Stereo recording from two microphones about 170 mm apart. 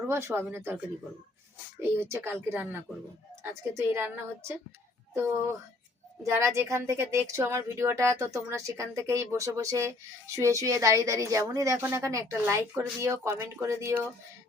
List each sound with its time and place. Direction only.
0.1 s a woman's voice: 15° right (ahead or behind)
2.0 s a woman's voice: 15° right (ahead or behind)
6.2 s a woman's voice: 15° right (ahead or behind)